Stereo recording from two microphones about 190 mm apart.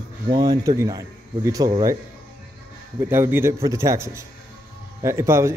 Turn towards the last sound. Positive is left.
turn(degrees=-15)  # may be behind; listen again after turning